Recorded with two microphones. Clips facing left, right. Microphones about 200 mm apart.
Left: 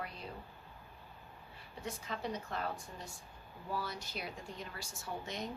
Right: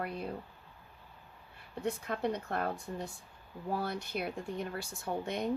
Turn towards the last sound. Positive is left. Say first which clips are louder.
# right 7 dB
turn(degrees=-55)  # may be behind; listen again after turning